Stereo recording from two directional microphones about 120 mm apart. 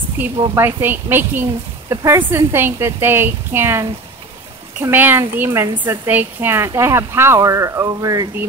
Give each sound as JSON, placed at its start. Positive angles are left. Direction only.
{"t": 0.2, "sound": "a woman's voice", "side_deg": -15}
{"t": 4.8, "sound": "a woman's voice", "side_deg": -15}